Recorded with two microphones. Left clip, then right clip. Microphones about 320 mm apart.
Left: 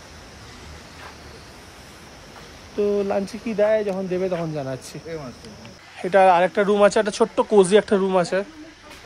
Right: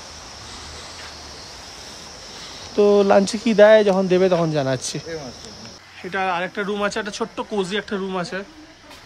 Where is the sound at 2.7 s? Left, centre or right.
Centre.